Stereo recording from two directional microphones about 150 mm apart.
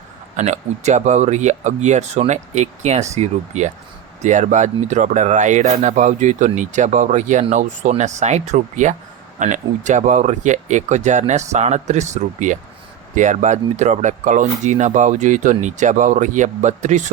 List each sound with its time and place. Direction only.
0.3 s speech: 50° right (ahead or behind)